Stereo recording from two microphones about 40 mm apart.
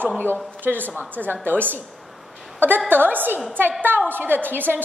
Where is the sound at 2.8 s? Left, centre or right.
Right.